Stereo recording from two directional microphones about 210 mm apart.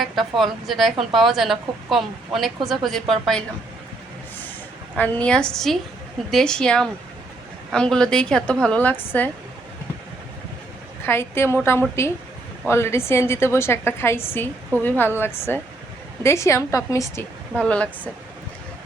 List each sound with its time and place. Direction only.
0.0 s speech: centre (ahead or behind)
4.9 s a woman's voice: 5° left (ahead or behind)
11.0 s a woman's voice: 10° left (ahead or behind)